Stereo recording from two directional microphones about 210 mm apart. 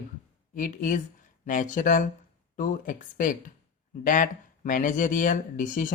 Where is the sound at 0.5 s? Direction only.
40° left (ahead or behind).